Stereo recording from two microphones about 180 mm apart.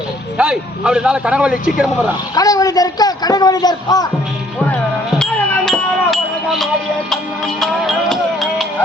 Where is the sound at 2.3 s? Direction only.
20° left (ahead or behind).